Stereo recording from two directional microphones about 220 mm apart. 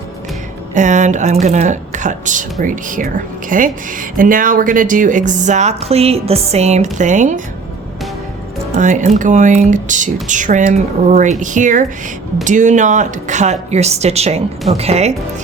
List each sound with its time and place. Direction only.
0.7 s a woman's voice: 35° right (ahead or behind)
8.7 s a woman's voice: 35° right (ahead or behind)